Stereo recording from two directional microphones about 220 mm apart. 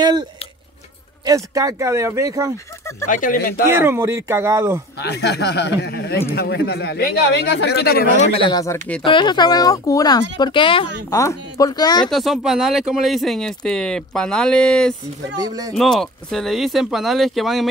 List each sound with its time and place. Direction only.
0.0 s speech: 20° right (ahead or behind)
3.1 s speech: 40° left (ahead or behind)
3.7 s speech: 10° right (ahead or behind)
5.0 s speech: 50° left (ahead or behind)
8.3 s speech: 20° left (ahead or behind)
12.1 s speech: centre (ahead or behind)
15.3 s speech: 15° right (ahead or behind)
15.7 s speech: centre (ahead or behind)